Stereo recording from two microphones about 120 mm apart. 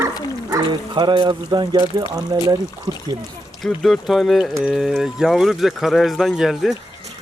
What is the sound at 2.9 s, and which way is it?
Pour, 35° right (ahead or behind).